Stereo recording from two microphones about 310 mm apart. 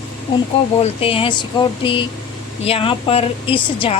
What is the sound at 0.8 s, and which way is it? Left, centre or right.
A woman's voice, centre.